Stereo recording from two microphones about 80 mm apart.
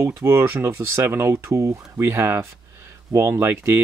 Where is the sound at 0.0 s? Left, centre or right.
Right.